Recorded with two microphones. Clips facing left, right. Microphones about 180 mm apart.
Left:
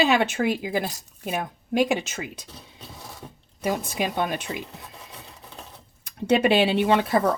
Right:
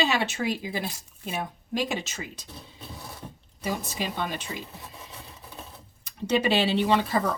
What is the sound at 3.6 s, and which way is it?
Speech, 55° left (ahead or behind).